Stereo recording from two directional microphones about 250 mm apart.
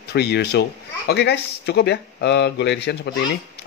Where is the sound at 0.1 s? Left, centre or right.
Left.